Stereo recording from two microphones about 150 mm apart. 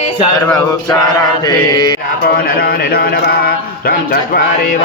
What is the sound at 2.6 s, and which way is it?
A man's voice, 90° left.